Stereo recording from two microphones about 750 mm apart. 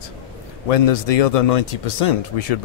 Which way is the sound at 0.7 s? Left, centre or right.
Left.